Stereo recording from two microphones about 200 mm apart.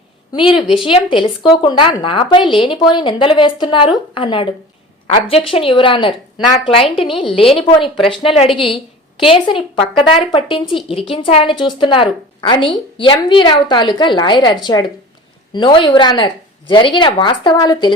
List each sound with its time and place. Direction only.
0.3 s speech: 25° left (ahead or behind)